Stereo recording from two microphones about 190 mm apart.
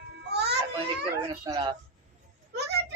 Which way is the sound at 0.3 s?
60° right (ahead or behind).